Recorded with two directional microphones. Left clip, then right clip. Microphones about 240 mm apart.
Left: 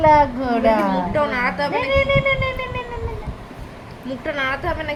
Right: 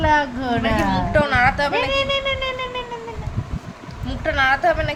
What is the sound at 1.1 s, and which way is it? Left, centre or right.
Music, right.